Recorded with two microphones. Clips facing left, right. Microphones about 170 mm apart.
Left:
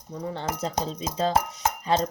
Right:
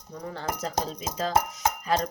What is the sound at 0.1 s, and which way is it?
Cutlery, 25° left (ahead or behind).